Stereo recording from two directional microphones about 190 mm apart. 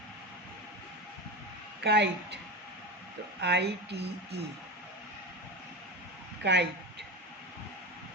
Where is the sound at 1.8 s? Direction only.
60° right (ahead or behind).